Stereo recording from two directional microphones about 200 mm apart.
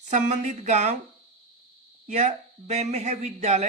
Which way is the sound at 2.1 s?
35° right (ahead or behind).